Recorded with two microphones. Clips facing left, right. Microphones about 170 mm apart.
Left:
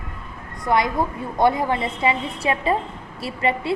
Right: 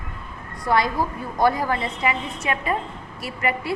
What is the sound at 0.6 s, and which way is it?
A woman's voice, 20° left (ahead or behind).